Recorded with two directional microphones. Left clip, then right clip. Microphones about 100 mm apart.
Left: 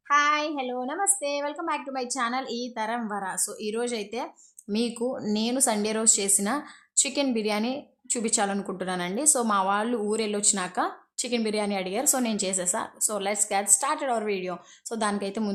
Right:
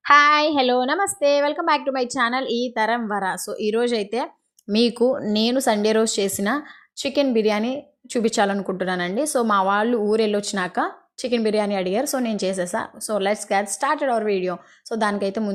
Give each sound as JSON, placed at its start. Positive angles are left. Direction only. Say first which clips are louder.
{"t": 0.0, "sound": "a woman's voice", "louder": "right 8 dB", "side_deg": -90}
{"t": 9.2, "sound": "a woman's voice", "louder": "right 3 dB", "side_deg": -40}
{"t": 9.5, "sound": "a woman's voice", "louder": "right 7 dB", "side_deg": -50}
{"t": 11.4, "sound": "speech", "louder": "right 7 dB", "side_deg": -45}
{"t": 12.0, "sound": "a woman's voice", "louder": "right 4 dB", "side_deg": -30}